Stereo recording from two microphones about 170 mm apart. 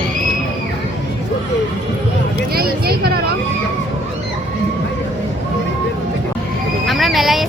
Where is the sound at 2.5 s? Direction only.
65° right (ahead or behind).